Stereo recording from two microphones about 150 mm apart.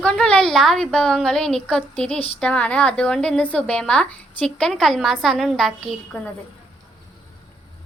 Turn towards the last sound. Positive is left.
turn(degrees=10)  # may be behind; listen again after turning